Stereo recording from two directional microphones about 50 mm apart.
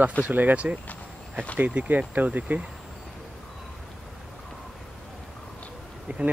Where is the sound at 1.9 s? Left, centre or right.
Right.